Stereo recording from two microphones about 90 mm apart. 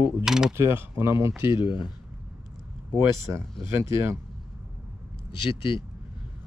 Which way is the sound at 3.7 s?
30° right (ahead or behind).